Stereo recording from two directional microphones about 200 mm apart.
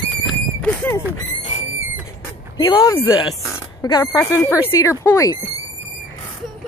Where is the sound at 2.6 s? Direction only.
25° left (ahead or behind).